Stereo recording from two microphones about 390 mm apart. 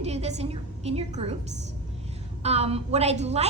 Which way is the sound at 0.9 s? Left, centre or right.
Centre.